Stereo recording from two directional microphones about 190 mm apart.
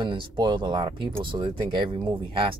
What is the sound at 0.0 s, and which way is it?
Speech, 25° right (ahead or behind).